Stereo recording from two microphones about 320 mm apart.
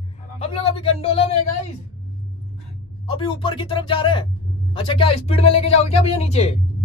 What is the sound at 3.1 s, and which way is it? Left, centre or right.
Speech, centre.